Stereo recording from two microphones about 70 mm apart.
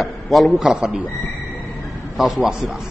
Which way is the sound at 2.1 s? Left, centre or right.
Centre.